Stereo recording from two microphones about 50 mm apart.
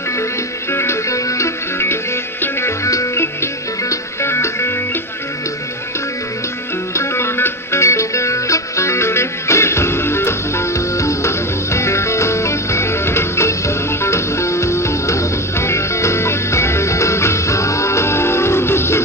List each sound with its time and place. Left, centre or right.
0.7 s music: left
2.8 s music: left
3.9 s music: left
6.9 s music: left
7.8 s music: left